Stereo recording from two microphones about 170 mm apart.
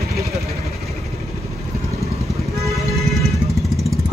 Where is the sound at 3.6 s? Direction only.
Centre (ahead or behind).